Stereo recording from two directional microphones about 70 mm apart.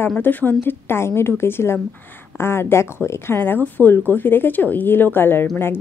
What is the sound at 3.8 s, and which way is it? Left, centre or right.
A woman's voice, left.